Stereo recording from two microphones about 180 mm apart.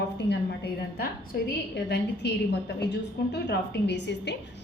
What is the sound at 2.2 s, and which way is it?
A woman's voice, 70° left (ahead or behind).